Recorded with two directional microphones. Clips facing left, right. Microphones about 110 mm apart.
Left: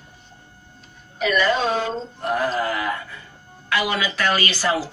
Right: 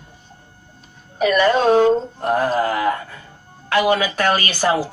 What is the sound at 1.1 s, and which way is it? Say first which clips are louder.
Speech: right 5 dB; 50° right (ahead or behind).